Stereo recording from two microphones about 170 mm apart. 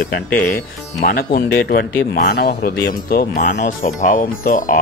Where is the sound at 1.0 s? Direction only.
60° left (ahead or behind).